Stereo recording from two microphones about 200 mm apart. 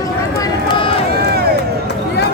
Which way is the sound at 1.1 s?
50° right (ahead or behind).